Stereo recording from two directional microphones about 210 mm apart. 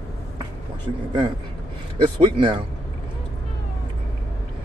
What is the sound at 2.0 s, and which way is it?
Speech, 20° right (ahead or behind).